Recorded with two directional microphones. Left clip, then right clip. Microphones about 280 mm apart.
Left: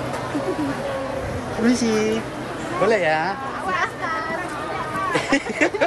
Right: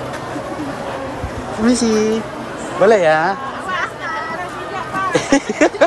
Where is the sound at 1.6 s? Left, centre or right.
Centre.